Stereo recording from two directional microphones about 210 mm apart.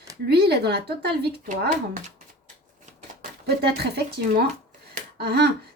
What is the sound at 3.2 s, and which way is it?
Speech, 50° right (ahead or behind).